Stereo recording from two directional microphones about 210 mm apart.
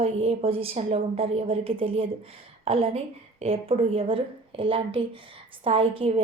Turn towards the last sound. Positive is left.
turn(degrees=-25)  # may be behind; listen again after turning